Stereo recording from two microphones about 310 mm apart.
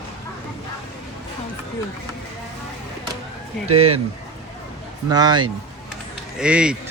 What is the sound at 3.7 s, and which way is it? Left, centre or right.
Speech, right.